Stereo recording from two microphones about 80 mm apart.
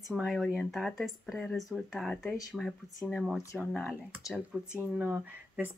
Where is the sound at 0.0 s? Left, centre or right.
Centre.